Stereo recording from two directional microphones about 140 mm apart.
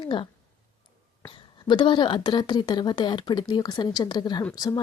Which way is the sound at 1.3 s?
35° left (ahead or behind).